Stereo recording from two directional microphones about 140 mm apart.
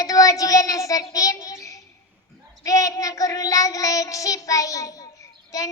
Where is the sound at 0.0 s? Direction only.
25° left (ahead or behind).